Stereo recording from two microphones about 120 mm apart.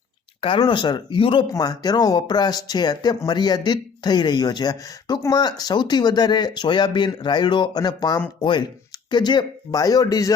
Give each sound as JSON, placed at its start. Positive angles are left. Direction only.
{"t": 0.6, "sound": "speech", "side_deg": 40}
{"t": 1.5, "sound": "speech", "side_deg": 30}